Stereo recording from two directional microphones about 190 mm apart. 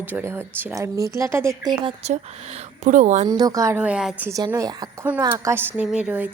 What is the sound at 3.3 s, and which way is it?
Speech, 20° right (ahead or behind).